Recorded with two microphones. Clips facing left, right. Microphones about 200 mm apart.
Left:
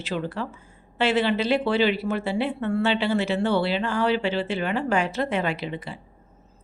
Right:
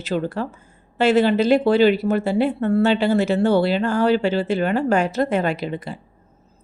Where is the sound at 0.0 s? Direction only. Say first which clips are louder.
Right 5 dB; 45° right (ahead or behind).